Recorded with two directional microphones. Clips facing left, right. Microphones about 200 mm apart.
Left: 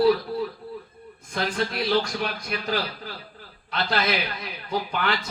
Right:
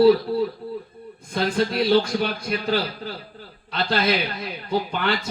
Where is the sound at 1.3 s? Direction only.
30° right (ahead or behind).